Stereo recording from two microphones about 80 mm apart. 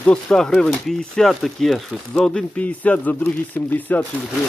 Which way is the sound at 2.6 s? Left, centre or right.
Centre.